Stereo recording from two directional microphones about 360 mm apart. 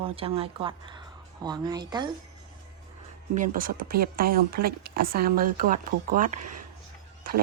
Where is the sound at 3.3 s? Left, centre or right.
Right.